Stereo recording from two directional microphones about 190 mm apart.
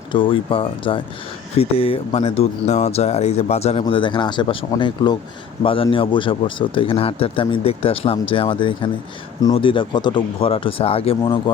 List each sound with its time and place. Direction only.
0.1 s speech: 25° left (ahead or behind)